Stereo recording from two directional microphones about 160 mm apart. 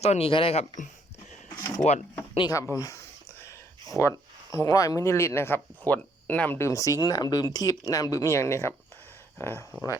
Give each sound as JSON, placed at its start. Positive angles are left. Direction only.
{"t": 0.0, "sound": "speech", "side_deg": 40}
{"t": 1.5, "sound": "a sound", "side_deg": 15}
{"t": 2.5, "sound": "speech", "side_deg": 20}